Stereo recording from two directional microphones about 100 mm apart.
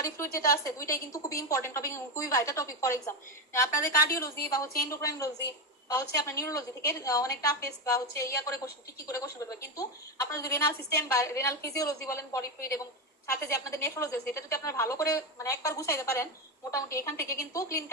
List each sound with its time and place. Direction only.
0.0 s a woman's voice: 30° left (ahead or behind)
13.8 s a woman's voice: 30° left (ahead or behind)